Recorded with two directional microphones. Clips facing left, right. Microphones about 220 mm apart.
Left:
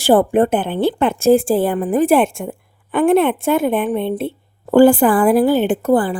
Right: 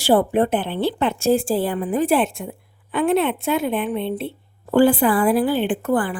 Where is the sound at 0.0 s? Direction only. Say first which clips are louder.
Left 4 dB; 50° left (ahead or behind).